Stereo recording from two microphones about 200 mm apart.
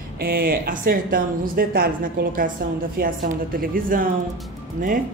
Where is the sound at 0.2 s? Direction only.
50° right (ahead or behind).